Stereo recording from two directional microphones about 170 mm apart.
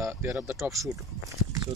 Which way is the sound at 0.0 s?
15° right (ahead or behind).